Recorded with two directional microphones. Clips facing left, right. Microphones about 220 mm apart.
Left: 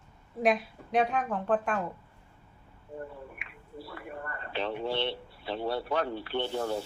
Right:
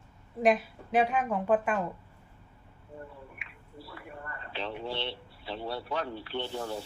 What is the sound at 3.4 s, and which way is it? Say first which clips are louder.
Speech: left 4 dB; 55° left (ahead or behind).